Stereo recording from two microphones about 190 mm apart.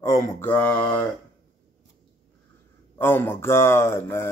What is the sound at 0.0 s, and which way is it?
Speech, 15° left (ahead or behind).